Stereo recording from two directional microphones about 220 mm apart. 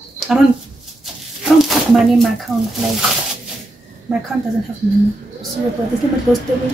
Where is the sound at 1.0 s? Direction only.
Centre (ahead or behind).